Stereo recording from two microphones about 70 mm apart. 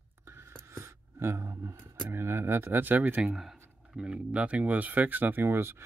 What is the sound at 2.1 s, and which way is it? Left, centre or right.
Speech, right.